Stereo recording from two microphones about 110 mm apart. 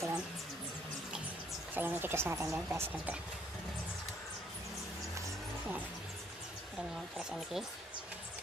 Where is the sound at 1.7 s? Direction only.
20° right (ahead or behind).